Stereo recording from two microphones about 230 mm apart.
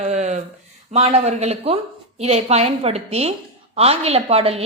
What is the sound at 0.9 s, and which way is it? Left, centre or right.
A woman's voice, right.